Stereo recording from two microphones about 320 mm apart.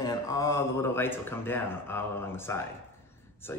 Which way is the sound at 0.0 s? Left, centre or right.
Centre.